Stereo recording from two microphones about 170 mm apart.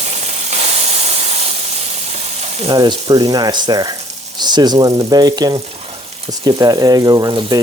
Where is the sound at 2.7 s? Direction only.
25° right (ahead or behind).